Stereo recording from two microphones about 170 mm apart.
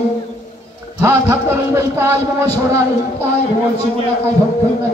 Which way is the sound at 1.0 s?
15° right (ahead or behind).